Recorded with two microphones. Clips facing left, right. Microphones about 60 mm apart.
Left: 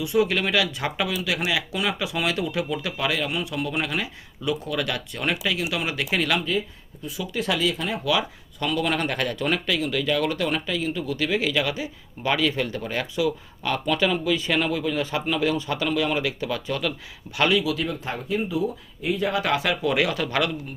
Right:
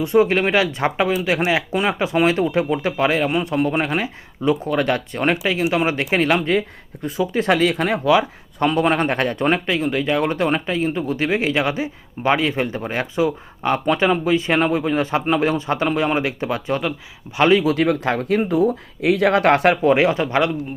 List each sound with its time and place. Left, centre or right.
0.0 s speech: right
6.4 s speech: right
7.2 s speech: right
8.0 s speech: right
17.7 s speech: right